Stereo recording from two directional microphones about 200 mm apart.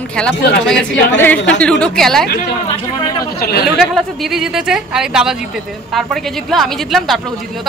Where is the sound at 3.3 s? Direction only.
50° left (ahead or behind).